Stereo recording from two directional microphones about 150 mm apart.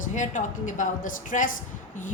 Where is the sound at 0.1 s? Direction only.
55° left (ahead or behind).